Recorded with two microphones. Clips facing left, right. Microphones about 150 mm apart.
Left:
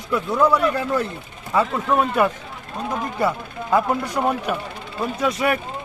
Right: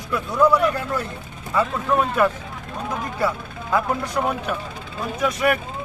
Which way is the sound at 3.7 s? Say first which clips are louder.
Left 2 dB; 10° left (ahead or behind).